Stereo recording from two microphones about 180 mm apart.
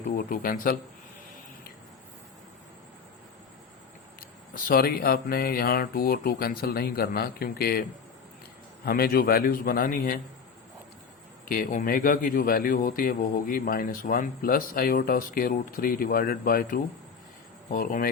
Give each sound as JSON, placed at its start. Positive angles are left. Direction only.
{"t": 0.1, "sound": "speech", "side_deg": 50}
{"t": 4.5, "sound": "speech", "side_deg": 55}
{"t": 11.4, "sound": "speech", "side_deg": 50}